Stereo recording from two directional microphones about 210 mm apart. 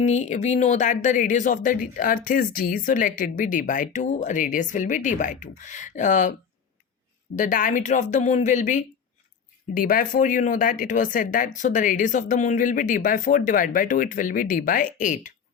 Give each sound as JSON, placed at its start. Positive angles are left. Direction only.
{"t": 0.0, "sound": "speech", "side_deg": 35}
{"t": 7.3, "sound": "speech", "side_deg": 40}